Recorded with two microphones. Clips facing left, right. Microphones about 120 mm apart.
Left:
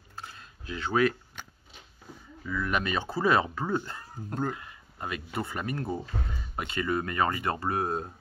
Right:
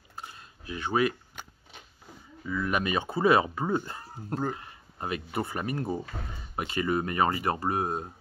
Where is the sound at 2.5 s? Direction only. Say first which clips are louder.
Right 1 dB; 15° right (ahead or behind).